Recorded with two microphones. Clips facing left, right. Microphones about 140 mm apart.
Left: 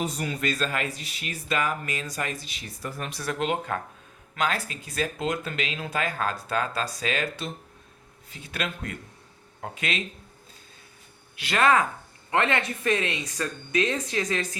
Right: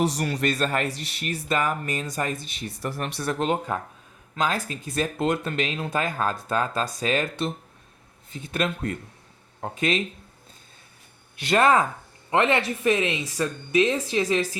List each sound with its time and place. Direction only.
0.0 s a man's voice: 80° right
1.5 s speech: 50° right (ahead or behind); by 3.2 s 70° right (ahead or behind)
3.3 s speech: 40° right (ahead or behind)
8.5 s speech: 40° right (ahead or behind)
11.5 s speech: 30° right (ahead or behind)